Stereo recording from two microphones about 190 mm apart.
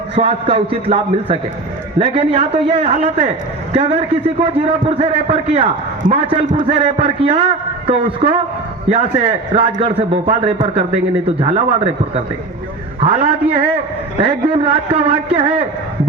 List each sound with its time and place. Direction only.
0.2 s a man's voice: 30° right (ahead or behind)